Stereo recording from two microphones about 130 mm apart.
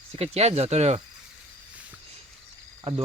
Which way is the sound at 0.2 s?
55° right (ahead or behind).